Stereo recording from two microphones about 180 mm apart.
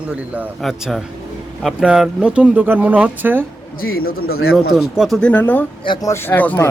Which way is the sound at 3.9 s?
55° left (ahead or behind).